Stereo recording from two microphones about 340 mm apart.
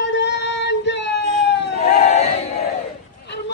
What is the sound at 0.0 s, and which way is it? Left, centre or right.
Child singing, left.